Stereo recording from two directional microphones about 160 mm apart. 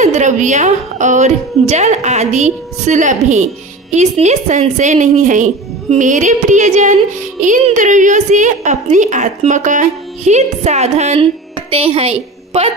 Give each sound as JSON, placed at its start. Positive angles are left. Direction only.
{"t": 0.0, "sound": "a woman's voice", "side_deg": -45}